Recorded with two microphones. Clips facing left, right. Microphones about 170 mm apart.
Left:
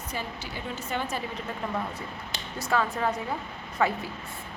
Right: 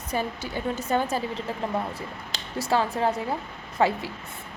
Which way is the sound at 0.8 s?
40° right (ahead or behind).